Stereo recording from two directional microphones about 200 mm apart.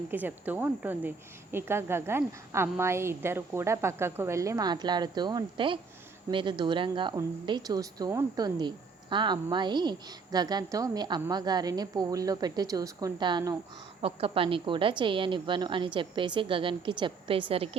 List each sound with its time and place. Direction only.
0.1 s speech: 10° right (ahead or behind); by 17.4 s 25° right (ahead or behind)